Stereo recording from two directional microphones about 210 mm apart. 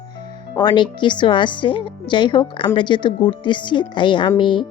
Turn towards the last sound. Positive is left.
turn(degrees=25)  # may be behind; listen again after turning